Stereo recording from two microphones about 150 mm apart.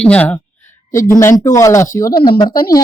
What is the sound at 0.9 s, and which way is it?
Speech, 60° left (ahead or behind).